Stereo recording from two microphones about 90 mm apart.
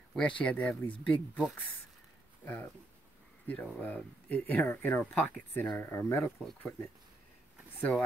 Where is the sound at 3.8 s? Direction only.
20° left (ahead or behind).